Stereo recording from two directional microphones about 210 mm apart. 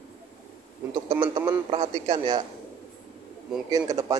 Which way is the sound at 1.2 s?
20° right (ahead or behind).